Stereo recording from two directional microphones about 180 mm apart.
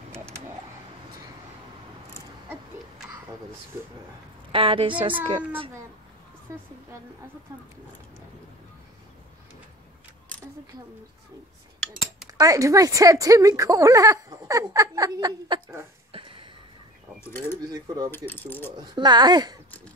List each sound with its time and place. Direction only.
4.5 s speech: 30° right (ahead or behind)
6.5 s a woman's voice: 15° right (ahead or behind)
11.8 s a sound: centre (ahead or behind)
12.3 s speech: 20° right (ahead or behind)
17.2 s speech: 15° left (ahead or behind)
17.6 s speech: 20° right (ahead or behind)
18.1 s speech: 10° left (ahead or behind)
18.8 s speech: 25° right (ahead or behind)